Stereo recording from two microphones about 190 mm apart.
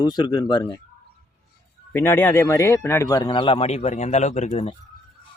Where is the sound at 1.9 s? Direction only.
10° left (ahead or behind); by 4.7 s 35° left (ahead or behind).